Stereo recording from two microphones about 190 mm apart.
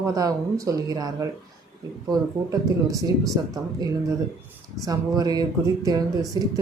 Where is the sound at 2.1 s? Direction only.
15° right (ahead or behind).